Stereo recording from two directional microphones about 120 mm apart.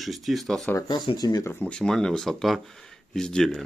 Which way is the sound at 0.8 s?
35° left (ahead or behind).